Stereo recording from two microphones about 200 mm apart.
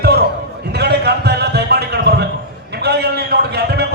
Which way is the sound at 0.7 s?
55° right (ahead or behind).